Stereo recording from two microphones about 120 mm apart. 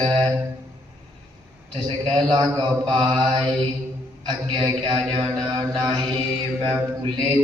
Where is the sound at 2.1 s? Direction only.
40° right (ahead or behind).